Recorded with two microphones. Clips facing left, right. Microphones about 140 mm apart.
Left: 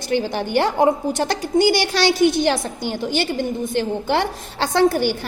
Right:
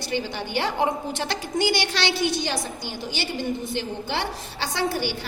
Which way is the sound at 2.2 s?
55° left (ahead or behind).